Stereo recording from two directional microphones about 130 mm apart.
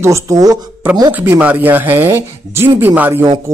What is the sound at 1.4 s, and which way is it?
Speech, 10° right (ahead or behind).